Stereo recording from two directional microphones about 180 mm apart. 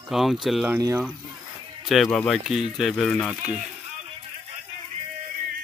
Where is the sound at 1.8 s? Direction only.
Centre (ahead or behind).